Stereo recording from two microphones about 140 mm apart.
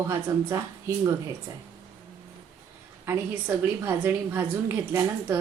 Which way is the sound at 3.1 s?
15° right (ahead or behind).